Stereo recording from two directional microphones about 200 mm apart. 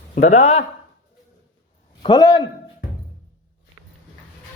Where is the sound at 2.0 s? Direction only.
20° left (ahead or behind).